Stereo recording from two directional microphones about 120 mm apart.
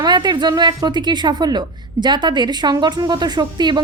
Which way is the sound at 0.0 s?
40° right (ahead or behind).